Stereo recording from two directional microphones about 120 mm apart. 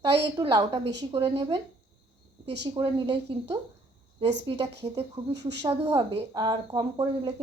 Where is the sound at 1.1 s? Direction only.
55° right (ahead or behind).